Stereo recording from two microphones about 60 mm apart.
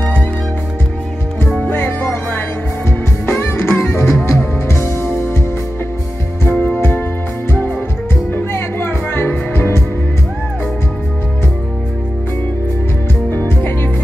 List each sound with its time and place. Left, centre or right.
1.6 s music: left
6.6 s music: left
8.3 s music: left
13.3 s music: left